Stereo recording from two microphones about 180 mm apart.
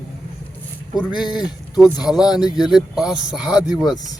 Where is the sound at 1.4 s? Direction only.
25° left (ahead or behind).